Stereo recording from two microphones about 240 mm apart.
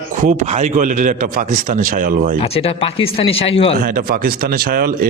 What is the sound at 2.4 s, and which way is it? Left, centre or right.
A man's voice, left.